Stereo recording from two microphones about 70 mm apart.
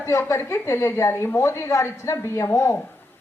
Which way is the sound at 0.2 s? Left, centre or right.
Left.